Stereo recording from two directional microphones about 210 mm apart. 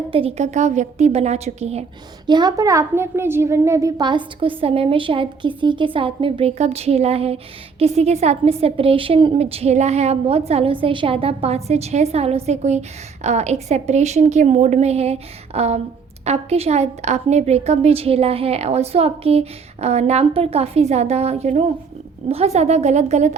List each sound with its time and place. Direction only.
0.1 s a woman's voice: 30° right (ahead or behind)
2.2 s a woman's voice: 20° right (ahead or behind)